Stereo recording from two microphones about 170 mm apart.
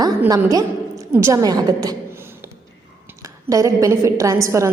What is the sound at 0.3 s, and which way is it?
A woman's voice, 20° right (ahead or behind).